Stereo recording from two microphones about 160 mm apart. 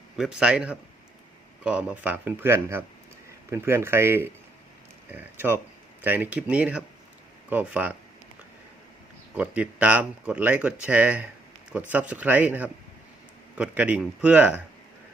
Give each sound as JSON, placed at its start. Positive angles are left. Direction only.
{"t": 0.2, "sound": "a man's voice", "side_deg": -5}
{"t": 9.3, "sound": "speech", "side_deg": -10}